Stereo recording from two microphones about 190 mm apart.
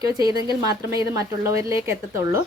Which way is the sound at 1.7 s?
15° right (ahead or behind).